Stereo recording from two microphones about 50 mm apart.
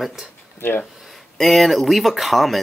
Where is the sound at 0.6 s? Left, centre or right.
Left.